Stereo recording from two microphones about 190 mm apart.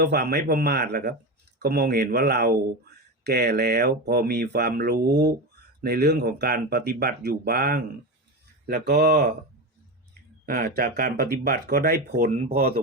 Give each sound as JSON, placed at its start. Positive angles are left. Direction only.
{"t": 0.0, "sound": "speech", "side_deg": -55}
{"t": 10.4, "sound": "speech", "side_deg": -50}